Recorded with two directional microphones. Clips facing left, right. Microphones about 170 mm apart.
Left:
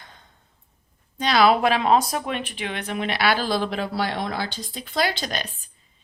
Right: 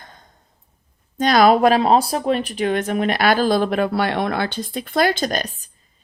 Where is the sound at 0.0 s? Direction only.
45° right (ahead or behind).